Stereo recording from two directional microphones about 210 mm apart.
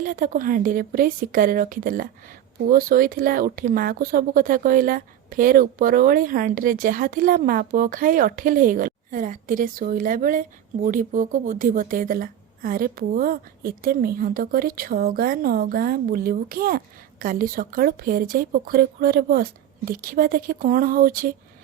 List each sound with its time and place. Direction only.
0.0 s a woman's voice: 40° right (ahead or behind)